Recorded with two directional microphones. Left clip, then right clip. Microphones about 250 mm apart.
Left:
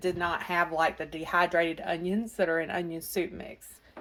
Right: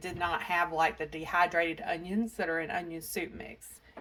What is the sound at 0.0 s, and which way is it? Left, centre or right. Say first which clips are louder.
A woman's voice: left 3 dB; left.